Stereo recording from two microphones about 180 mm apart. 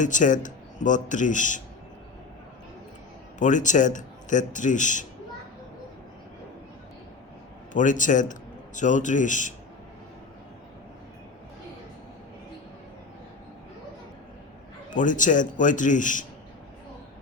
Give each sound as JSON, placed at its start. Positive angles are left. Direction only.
{"t": 0.0, "sound": "a man's voice", "side_deg": 45}
{"t": 3.3, "sound": "a man's voice", "side_deg": 45}
{"t": 7.7, "sound": "a man's voice", "side_deg": 45}
{"t": 14.8, "sound": "a man's voice", "side_deg": 45}